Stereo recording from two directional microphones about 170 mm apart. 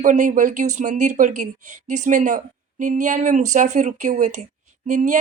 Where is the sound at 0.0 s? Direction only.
50° right (ahead or behind).